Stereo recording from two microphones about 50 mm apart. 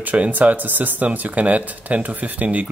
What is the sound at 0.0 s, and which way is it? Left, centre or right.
Speech, right.